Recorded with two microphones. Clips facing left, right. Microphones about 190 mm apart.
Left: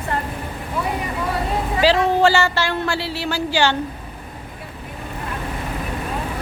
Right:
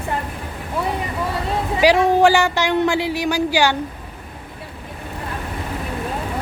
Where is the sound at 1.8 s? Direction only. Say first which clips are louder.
Right 2 dB; 15° right (ahead or behind).